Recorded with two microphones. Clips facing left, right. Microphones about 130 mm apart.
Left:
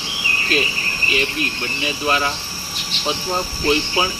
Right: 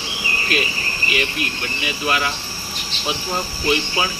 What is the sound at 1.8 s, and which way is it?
Speech, 30° left (ahead or behind).